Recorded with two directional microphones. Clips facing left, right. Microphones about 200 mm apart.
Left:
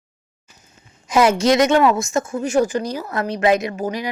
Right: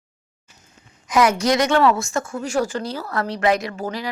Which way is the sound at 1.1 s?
25° left (ahead or behind).